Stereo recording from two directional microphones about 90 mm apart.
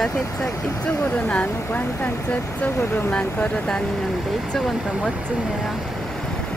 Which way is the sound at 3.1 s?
10° left (ahead or behind).